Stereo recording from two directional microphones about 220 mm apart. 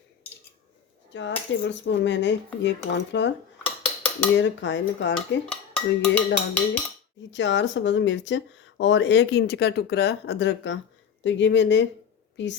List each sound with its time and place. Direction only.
1.1 s speech: 55° left (ahead or behind)
3.8 s dishes: 5° left (ahead or behind)
4.4 s speech: 55° left (ahead or behind)
5.5 s a sound: 5° left (ahead or behind)
7.3 s speech: 55° left (ahead or behind)